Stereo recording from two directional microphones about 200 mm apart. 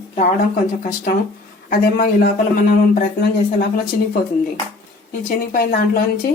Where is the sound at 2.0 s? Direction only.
45° left (ahead or behind).